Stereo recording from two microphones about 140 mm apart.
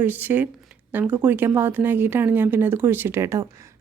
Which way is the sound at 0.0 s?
15° right (ahead or behind).